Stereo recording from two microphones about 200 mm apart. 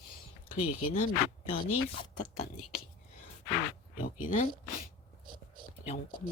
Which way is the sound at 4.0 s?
40° left (ahead or behind).